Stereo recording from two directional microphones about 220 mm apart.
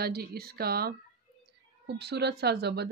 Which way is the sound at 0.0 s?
45° right (ahead or behind).